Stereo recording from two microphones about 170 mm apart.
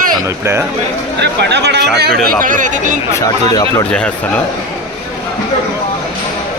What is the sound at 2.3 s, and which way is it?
Speech, 50° right (ahead or behind).